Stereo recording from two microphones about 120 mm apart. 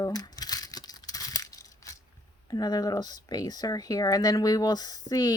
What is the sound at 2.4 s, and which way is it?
Speech, 35° left (ahead or behind).